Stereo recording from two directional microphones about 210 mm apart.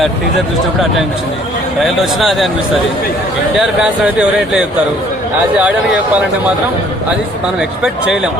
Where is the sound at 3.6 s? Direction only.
5° right (ahead or behind).